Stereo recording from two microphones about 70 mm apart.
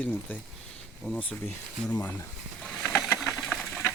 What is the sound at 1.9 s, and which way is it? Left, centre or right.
Speech, left.